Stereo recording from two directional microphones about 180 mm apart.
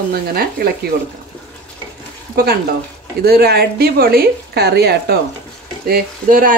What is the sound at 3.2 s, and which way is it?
Speech, 60° right (ahead or behind).